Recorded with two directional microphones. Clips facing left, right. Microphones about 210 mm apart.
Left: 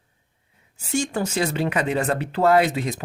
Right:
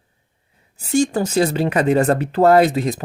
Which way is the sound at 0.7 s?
40° right (ahead or behind).